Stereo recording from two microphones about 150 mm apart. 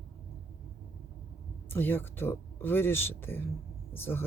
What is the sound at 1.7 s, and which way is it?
Speech, 15° left (ahead or behind).